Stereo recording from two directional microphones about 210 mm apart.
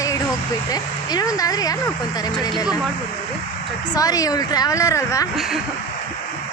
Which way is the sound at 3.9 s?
15° left (ahead or behind).